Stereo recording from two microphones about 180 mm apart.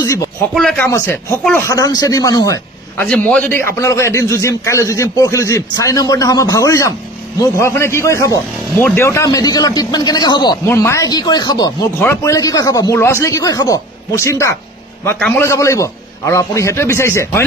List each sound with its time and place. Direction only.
0.6 s speech: 5° left (ahead or behind)
0.8 s a man's voice: 15° left (ahead or behind)
3.1 s a man's voice: 10° left (ahead or behind)